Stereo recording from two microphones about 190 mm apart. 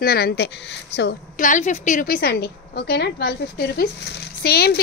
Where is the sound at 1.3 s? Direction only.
40° left (ahead or behind).